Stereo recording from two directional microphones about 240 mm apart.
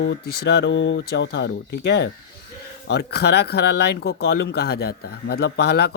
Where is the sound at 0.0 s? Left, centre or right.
Left.